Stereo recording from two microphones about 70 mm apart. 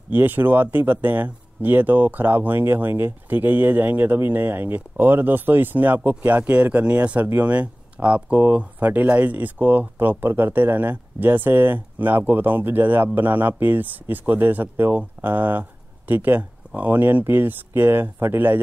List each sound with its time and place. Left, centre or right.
0.1 s speech: right